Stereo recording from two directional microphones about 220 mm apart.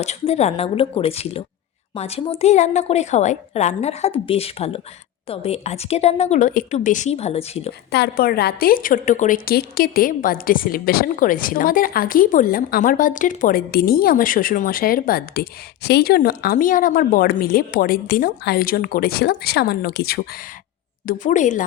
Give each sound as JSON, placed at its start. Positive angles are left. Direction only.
{"t": 0.0, "sound": "a woman's voice", "side_deg": 30}
{"t": 7.9, "sound": "a woman's voice", "side_deg": 45}
{"t": 21.1, "sound": "a woman's voice", "side_deg": 35}